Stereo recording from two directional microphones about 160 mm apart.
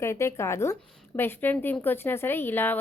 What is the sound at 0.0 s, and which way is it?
A woman's voice, 15° left (ahead or behind).